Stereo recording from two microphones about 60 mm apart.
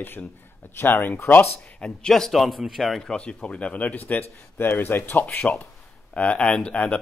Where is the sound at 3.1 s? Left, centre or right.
Centre.